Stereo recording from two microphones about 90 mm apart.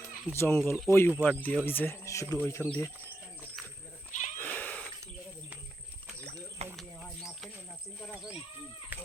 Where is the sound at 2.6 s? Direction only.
15° left (ahead or behind).